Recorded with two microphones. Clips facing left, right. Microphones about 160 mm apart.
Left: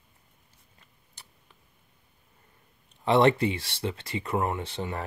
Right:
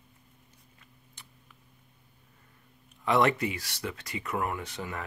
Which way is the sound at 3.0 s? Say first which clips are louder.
Left 4 dB; 30° left (ahead or behind).